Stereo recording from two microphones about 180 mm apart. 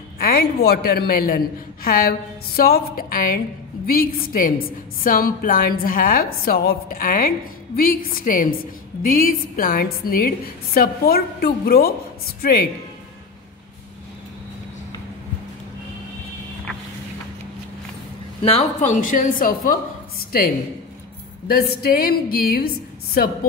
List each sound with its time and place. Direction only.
0.2 s a man's voice: 60° left (ahead or behind)
18.4 s a woman's voice: 35° left (ahead or behind)
21.5 s a man's voice: 60° left (ahead or behind)